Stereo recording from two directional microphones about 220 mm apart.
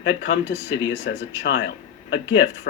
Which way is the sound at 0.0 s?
50° left (ahead or behind).